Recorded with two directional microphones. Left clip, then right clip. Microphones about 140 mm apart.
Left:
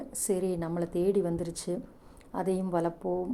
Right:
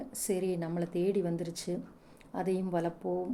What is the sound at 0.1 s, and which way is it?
A woman's voice, 10° left (ahead or behind).